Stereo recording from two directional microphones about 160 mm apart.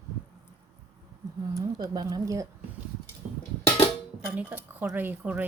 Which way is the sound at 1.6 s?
25° right (ahead or behind).